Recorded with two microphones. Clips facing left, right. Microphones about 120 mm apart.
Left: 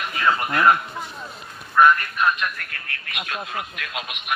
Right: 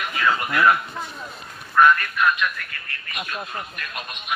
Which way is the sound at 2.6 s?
60° left (ahead or behind).